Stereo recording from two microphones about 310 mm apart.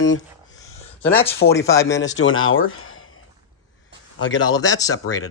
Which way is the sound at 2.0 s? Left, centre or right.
Left.